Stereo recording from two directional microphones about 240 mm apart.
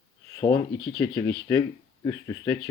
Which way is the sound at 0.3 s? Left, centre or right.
Centre.